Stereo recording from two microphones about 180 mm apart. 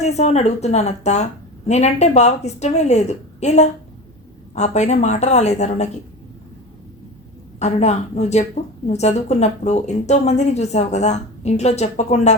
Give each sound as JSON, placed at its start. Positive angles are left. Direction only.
{"t": 0.0, "sound": "a woman's voice", "side_deg": 40}
{"t": 7.6, "sound": "a woman's voice", "side_deg": 40}